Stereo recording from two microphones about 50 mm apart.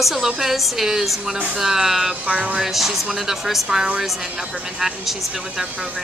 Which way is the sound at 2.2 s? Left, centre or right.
Right.